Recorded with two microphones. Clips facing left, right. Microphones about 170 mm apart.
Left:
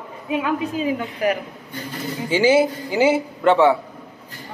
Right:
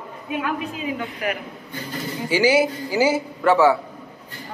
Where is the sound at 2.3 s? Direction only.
25° left (ahead or behind).